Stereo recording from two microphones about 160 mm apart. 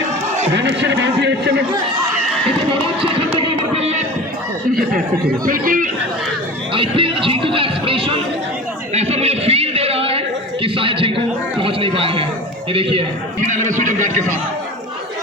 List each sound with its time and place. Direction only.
0.5 s a man's voice: 90° right
3.8 s music: 40° right (ahead or behind)
5.5 s speech: 60° right (ahead or behind)
6.7 s speech: 35° right (ahead or behind)
9.0 s a sound: 40° right (ahead or behind)
11.6 s chatter: 35° right (ahead or behind)
12.7 s speech: 35° right (ahead or behind)
13.5 s speech: 50° right (ahead or behind)